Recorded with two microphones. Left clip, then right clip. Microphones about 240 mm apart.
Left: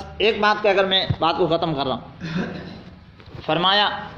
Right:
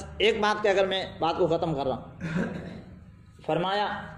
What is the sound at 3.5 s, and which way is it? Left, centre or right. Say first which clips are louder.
Speech: left 8 dB; centre.